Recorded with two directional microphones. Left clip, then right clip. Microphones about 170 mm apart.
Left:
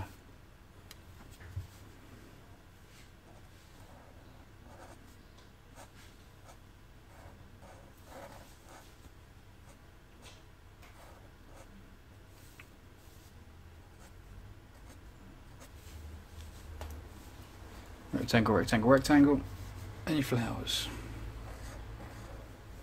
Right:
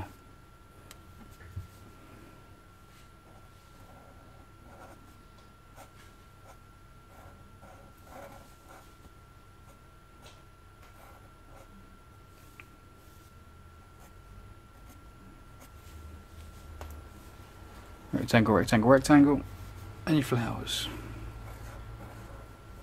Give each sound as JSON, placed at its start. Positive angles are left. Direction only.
{"t": 18.1, "sound": "speech", "side_deg": -20}